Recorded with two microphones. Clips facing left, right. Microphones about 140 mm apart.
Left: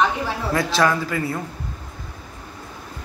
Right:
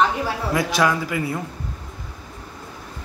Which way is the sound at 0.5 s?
15° right (ahead or behind).